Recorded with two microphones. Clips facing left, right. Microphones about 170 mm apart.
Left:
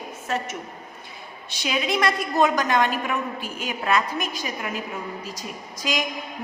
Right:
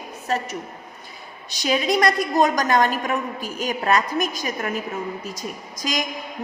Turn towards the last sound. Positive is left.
turn(degrees=-40)  # may be behind; listen again after turning